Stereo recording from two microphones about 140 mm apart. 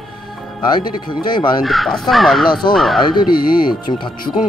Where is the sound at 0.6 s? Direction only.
35° left (ahead or behind).